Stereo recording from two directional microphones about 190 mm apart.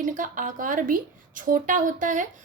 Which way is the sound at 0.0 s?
45° right (ahead or behind).